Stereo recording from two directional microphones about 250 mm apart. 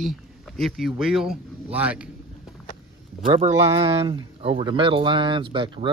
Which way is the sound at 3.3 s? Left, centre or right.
Right.